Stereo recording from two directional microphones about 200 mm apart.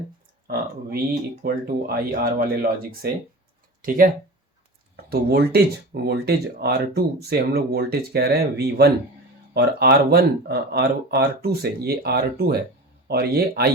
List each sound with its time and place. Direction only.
1.4 s speech: 50° right (ahead or behind)